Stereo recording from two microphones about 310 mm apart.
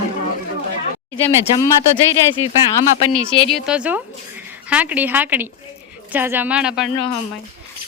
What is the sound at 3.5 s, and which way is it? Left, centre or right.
Speech, centre.